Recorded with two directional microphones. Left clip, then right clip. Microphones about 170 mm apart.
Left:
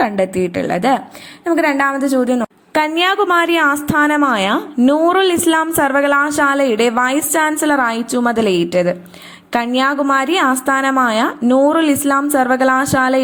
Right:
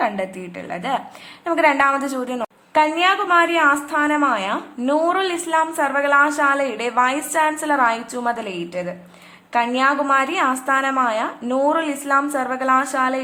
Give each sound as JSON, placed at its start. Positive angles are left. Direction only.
{"t": 0.0, "sound": "a woman's voice", "side_deg": 30}
{"t": 1.5, "sound": "a woman's voice", "side_deg": 20}